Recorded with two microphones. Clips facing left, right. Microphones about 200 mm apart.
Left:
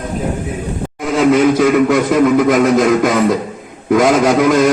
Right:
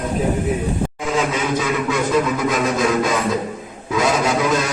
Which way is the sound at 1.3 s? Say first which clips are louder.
Left 10 dB; 55° left (ahead or behind).